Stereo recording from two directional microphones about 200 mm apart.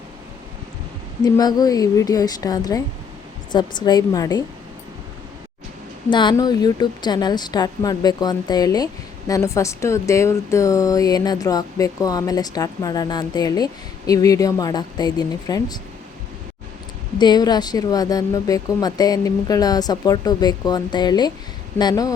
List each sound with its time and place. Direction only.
1.2 s a woman's voice: 20° left (ahead or behind)
6.1 s a woman's voice: 25° left (ahead or behind)
17.2 s a woman's voice: 20° left (ahead or behind)